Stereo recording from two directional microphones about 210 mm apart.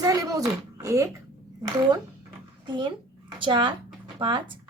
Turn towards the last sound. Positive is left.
turn(degrees=-20)  # may be behind; listen again after turning